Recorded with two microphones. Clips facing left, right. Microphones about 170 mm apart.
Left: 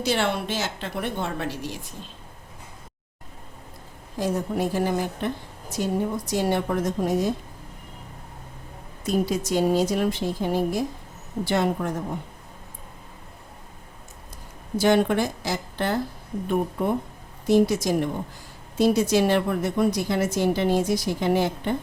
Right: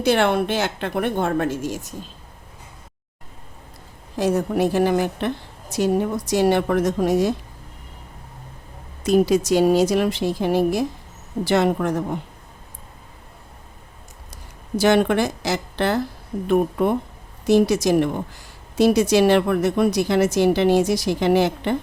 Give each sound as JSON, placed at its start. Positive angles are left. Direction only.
{"t": 0.0, "sound": "a woman's voice", "side_deg": -55}
{"t": 4.2, "sound": "a woman's voice", "side_deg": -75}
{"t": 9.0, "sound": "a woman's voice", "side_deg": -80}
{"t": 14.8, "sound": "a woman's voice", "side_deg": -80}